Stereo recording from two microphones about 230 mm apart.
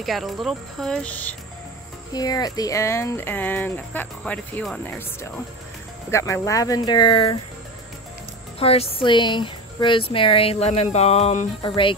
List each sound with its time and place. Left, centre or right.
0.0 s speech: centre
2.1 s speech: centre
8.5 s speech: left